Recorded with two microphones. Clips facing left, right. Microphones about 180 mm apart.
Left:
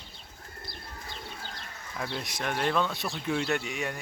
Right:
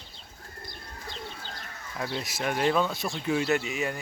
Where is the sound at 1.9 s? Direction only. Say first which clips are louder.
Right 2 dB; centre (ahead or behind).